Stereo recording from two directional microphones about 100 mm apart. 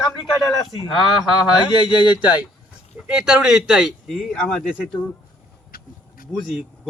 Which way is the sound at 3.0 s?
5° right (ahead or behind).